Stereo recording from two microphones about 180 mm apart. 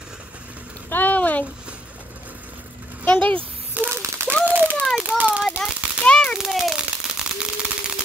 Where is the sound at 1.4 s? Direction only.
5° right (ahead or behind).